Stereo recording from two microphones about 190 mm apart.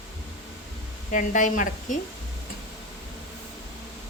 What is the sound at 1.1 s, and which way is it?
Speech, 40° left (ahead or behind).